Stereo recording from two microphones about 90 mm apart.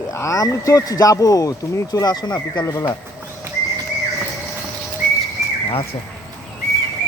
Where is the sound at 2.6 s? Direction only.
40° left (ahead or behind).